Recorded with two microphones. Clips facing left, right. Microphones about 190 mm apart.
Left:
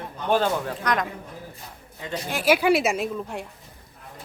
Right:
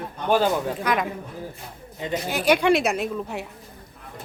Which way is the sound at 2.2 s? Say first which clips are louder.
Even; centre (ahead or behind).